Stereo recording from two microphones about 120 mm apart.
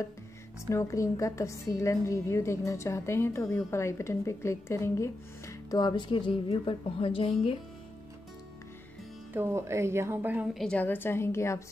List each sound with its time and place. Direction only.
0.7 s a woman's voice: 25° left (ahead or behind); by 7.5 s 50° left (ahead or behind)
9.3 s a woman's voice: 20° right (ahead or behind)
10.5 s a woman's voice: 5° left (ahead or behind)
10.8 s a woman's voice: 15° left (ahead or behind)